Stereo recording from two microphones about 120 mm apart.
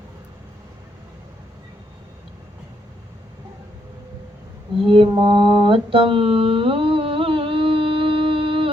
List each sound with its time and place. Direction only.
4.9 s mantra: 45° right (ahead or behind)